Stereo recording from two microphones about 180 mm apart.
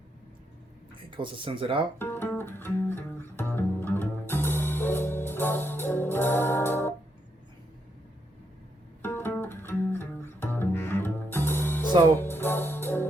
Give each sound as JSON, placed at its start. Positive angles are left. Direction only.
{"t": 1.1, "sound": "speech", "side_deg": -30}
{"t": 2.0, "sound": "music", "side_deg": 10}
{"t": 9.0, "sound": "music", "side_deg": 10}